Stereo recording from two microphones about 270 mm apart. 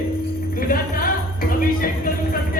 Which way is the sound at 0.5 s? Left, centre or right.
Left.